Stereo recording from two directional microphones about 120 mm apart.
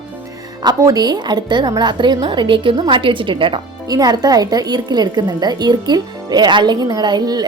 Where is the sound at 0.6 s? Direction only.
30° right (ahead or behind).